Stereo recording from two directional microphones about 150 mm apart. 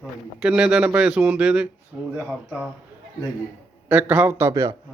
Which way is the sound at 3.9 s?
10° right (ahead or behind).